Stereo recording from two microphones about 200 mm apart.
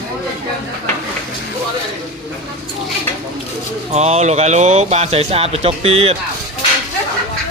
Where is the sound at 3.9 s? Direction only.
35° right (ahead or behind).